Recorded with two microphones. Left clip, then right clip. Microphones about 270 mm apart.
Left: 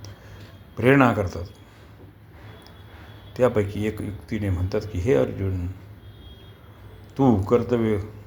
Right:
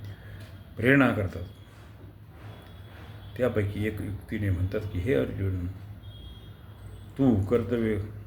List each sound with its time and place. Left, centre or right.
0.8 s speech: centre
3.3 s speech: centre
7.2 s speech: centre